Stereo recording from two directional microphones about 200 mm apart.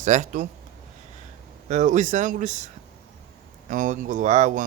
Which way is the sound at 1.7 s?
35° right (ahead or behind).